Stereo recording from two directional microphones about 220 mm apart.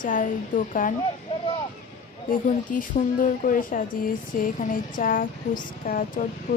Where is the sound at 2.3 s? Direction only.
35° left (ahead or behind).